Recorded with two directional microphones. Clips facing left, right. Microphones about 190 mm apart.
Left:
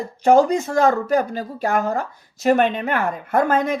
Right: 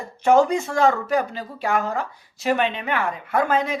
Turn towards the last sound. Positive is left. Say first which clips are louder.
# left 3 dB
turn(degrees=45)  # may be behind; listen again after turning